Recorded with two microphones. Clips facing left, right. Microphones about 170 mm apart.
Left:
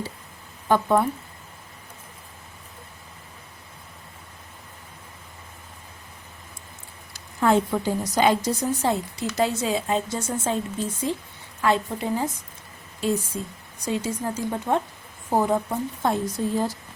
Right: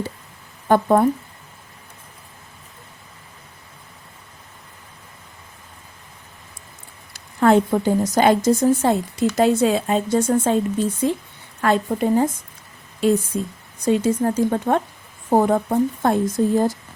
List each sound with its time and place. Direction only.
0.7 s a woman's voice: 45° right (ahead or behind)
7.1 s a sound: 65° right (ahead or behind)
7.7 s speech: 45° right (ahead or behind)
11.6 s a woman's voice: 55° right (ahead or behind)
13.0 s a woman's voice: 65° right (ahead or behind)